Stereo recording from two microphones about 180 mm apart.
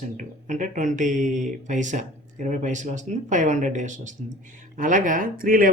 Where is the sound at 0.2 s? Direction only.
45° right (ahead or behind).